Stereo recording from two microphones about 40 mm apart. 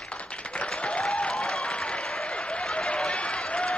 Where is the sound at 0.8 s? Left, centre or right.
Left.